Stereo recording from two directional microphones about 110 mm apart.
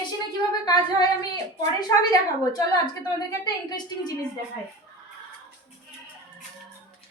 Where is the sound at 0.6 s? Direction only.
35° left (ahead or behind).